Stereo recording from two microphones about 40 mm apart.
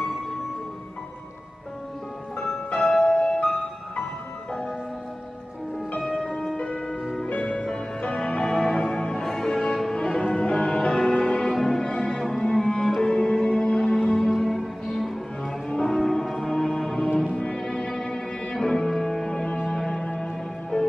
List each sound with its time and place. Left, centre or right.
2.8 s music: centre
6.5 s music: left
8.5 s music: centre
9.9 s music: left
11.5 s music: centre
11.9 s music: centre
12.2 s cello: centre
12.4 s cello: centre
13.0 s music: centre
15.7 s music: left
16.0 s music: centre